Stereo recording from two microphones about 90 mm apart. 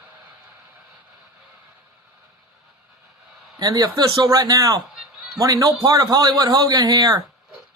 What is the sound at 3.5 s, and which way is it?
A man's voice, 45° right (ahead or behind).